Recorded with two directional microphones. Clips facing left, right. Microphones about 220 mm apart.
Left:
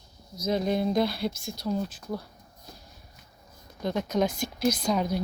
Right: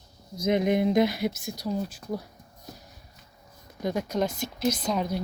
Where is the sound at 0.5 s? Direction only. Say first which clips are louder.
Right 3 dB; 15° right (ahead or behind).